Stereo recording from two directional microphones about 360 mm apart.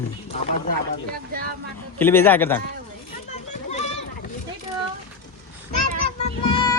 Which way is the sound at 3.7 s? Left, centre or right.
Centre.